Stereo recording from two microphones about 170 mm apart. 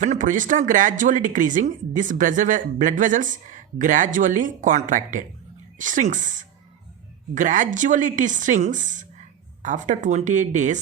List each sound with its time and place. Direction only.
0.0 s speech: 50° right (ahead or behind)